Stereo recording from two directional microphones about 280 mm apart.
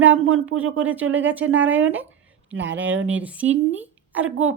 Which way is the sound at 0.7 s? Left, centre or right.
Centre.